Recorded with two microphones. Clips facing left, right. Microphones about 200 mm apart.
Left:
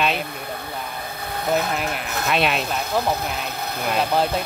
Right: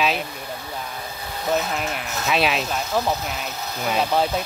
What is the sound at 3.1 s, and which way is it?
Speech, 60° left (ahead or behind).